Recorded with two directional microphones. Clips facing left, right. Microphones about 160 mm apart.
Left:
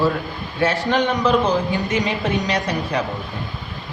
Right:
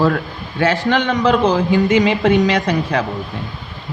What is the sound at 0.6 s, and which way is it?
Speech, 90° right.